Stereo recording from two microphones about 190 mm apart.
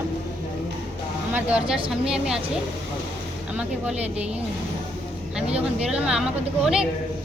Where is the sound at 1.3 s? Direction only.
5° right (ahead or behind).